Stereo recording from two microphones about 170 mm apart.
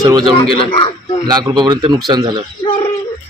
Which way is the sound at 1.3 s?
25° right (ahead or behind).